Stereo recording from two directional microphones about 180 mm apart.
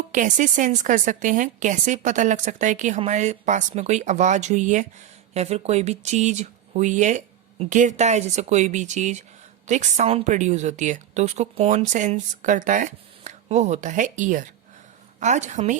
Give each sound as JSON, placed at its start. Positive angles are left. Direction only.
{"t": 0.1, "sound": "a woman's voice", "side_deg": -45}